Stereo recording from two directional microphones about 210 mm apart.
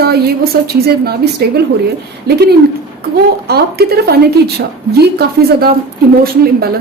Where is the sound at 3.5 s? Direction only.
50° right (ahead or behind).